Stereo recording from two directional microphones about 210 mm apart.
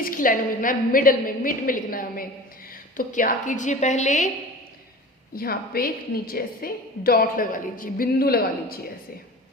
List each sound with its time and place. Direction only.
0.0 s a woman's voice: 40° left (ahead or behind)
5.3 s a woman's voice: 45° left (ahead or behind)